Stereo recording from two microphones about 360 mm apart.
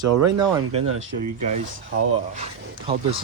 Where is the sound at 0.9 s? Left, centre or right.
Right.